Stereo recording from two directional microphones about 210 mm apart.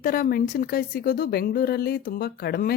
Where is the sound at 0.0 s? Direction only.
45° left (ahead or behind).